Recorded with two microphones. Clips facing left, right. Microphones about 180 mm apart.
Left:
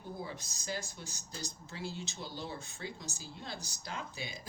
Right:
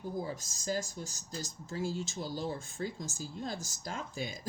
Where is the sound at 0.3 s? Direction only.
45° right (ahead or behind).